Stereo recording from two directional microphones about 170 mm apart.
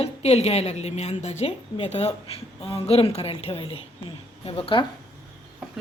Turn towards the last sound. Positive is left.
turn(degrees=30)  # may be behind; listen again after turning